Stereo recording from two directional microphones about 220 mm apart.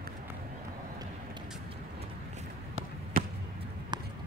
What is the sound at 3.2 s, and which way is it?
Basketball bounce, 40° right (ahead or behind).